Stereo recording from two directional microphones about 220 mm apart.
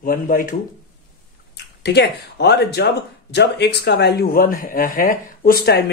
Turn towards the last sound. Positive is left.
turn(degrees=45)  # may be behind; listen again after turning